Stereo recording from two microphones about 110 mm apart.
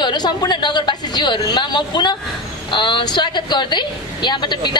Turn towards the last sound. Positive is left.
turn(degrees=45)  # may be behind; listen again after turning